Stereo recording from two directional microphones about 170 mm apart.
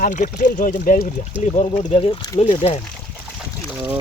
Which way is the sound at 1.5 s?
40° left (ahead or behind).